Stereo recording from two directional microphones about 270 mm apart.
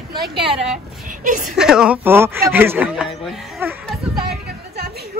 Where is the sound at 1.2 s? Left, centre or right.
Right.